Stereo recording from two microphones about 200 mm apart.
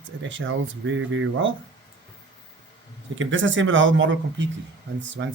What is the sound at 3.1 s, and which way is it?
Speech, 70° right (ahead or behind).